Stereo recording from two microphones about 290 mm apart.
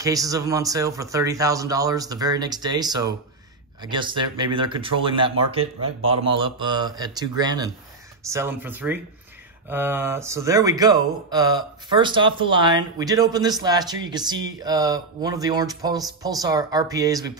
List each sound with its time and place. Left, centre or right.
0.0 s speech: centre